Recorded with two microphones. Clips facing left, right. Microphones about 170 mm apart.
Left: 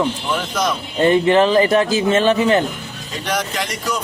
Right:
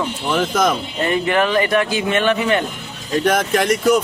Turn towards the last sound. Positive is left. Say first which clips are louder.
# right 9 dB
turn(degrees=-50)  # may be behind; listen again after turning